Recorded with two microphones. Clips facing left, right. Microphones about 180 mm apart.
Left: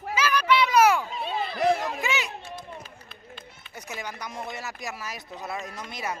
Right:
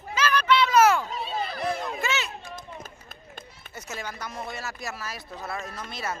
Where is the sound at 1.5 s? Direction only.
85° left.